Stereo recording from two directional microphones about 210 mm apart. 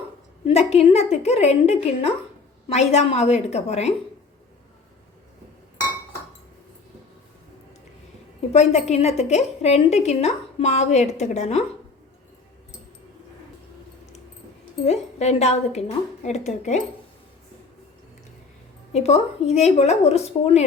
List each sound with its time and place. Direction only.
0.4 s a woman's voice: 30° left (ahead or behind)
8.5 s a woman's voice: 30° left (ahead or behind)
15.2 s a woman's voice: 30° left (ahead or behind)
18.9 s a woman's voice: 30° left (ahead or behind)